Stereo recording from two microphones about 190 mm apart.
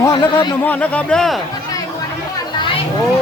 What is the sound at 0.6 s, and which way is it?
Speech, 5° left (ahead or behind).